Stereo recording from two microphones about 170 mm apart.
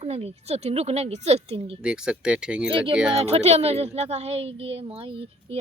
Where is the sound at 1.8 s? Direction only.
5° right (ahead or behind).